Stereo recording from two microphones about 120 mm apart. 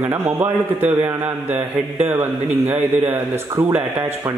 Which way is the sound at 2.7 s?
15° right (ahead or behind).